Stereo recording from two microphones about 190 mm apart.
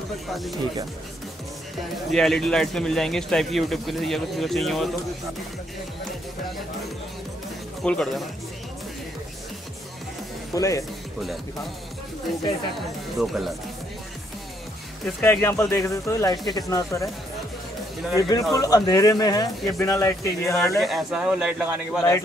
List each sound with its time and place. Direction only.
0.3 s a man's voice: centre (ahead or behind)
2.0 s a man's voice: centre (ahead or behind)
7.8 s a man's voice: 5° left (ahead or behind)
10.5 s speech: 15° left (ahead or behind)
13.2 s a man's voice: centre (ahead or behind)
15.0 s speech: 5° left (ahead or behind)
18.5 s speech: 20° left (ahead or behind)
20.7 s a man's voice: centre (ahead or behind)